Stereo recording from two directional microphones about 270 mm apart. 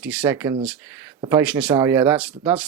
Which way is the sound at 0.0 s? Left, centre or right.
Centre.